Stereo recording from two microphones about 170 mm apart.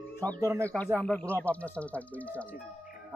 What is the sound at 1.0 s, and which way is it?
Speech, 10° left (ahead or behind).